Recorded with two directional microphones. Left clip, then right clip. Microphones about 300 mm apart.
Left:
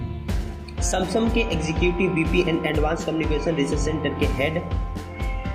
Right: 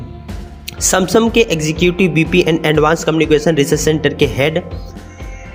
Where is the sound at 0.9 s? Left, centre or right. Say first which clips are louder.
Right 11 dB; right.